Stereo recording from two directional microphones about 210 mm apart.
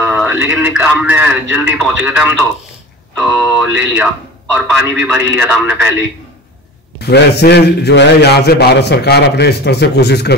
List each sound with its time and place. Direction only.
0.0 s a man's voice: 5° right (ahead or behind)
7.0 s a man's voice: 50° left (ahead or behind)